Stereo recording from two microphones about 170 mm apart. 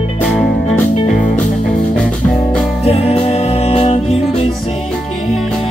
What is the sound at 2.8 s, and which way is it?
Music, 35° left (ahead or behind).